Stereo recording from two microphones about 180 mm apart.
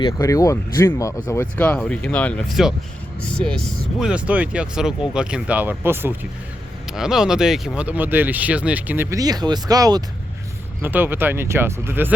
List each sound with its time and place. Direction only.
0.0 s speech: 20° left (ahead or behind)
4.0 s speech: 5° right (ahead or behind)